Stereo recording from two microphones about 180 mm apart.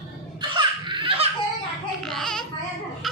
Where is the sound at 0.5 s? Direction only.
25° right (ahead or behind).